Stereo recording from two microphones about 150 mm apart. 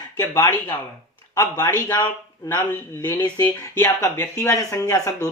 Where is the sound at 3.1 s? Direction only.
30° left (ahead or behind).